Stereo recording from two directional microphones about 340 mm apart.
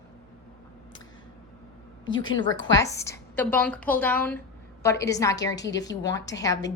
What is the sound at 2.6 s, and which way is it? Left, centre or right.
A woman's voice, centre.